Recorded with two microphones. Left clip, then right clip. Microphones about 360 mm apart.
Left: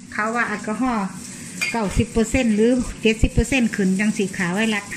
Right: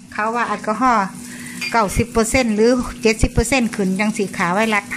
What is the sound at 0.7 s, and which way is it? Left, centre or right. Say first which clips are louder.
Speech: right 8 dB; right.